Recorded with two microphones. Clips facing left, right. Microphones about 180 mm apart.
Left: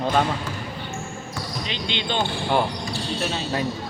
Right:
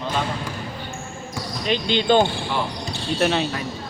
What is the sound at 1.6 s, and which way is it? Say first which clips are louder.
Speech: right 12 dB; 40° right (ahead or behind).